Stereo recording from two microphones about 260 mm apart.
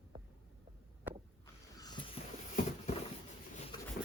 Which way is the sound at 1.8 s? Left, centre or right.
Centre.